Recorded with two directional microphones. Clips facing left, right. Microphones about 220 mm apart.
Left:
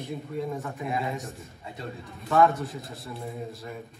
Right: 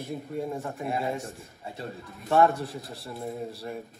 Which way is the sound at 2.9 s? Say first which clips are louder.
Right 2 dB; 30° right (ahead or behind).